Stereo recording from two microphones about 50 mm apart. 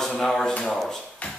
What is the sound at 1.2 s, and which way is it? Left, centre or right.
Music, left.